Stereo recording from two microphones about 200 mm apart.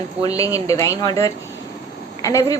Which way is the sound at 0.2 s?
15° left (ahead or behind).